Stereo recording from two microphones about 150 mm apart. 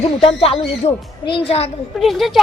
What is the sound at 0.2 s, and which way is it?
A woman's voice, 40° left (ahead or behind).